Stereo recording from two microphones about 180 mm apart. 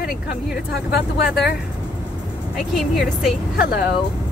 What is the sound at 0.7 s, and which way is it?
Speech, 65° left (ahead or behind).